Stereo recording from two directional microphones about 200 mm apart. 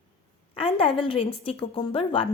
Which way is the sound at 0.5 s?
25° left (ahead or behind).